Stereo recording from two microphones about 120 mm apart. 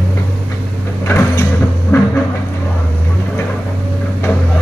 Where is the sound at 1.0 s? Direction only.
20° left (ahead or behind).